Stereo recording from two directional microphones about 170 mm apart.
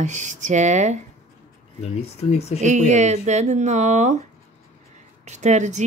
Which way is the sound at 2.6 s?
45° right (ahead or behind).